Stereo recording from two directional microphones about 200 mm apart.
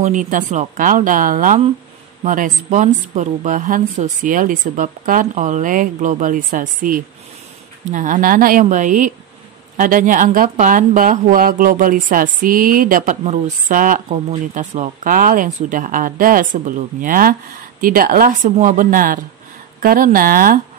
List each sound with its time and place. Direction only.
0.0 s a woman's voice: 40° right (ahead or behind)